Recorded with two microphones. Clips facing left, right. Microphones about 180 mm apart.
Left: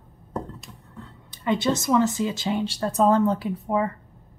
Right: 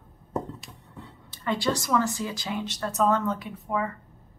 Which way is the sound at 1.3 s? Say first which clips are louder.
Left 4 dB; 20° left (ahead or behind).